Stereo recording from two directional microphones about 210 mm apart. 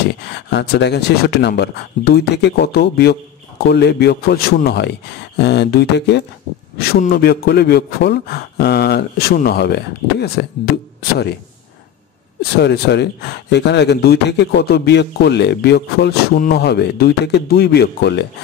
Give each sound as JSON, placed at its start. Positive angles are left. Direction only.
{"t": 0.1, "sound": "speech", "side_deg": 55}
{"t": 12.4, "sound": "speech", "side_deg": 50}